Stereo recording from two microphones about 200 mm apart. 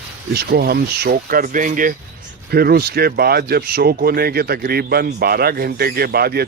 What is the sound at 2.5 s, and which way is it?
Speech, 50° right (ahead or behind).